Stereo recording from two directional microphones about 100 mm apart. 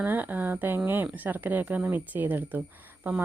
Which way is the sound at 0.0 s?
20° right (ahead or behind).